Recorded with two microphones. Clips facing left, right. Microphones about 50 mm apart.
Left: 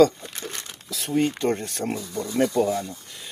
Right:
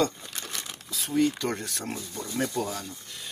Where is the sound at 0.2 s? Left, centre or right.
Left.